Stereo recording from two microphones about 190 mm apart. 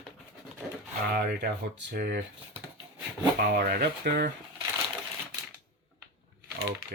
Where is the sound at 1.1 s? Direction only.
50° right (ahead or behind).